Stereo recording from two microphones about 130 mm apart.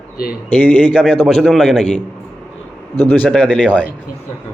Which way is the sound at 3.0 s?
15° left (ahead or behind).